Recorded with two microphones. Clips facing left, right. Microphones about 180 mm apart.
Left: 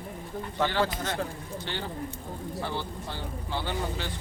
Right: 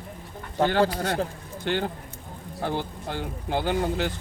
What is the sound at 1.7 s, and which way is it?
Speech, 55° right (ahead or behind).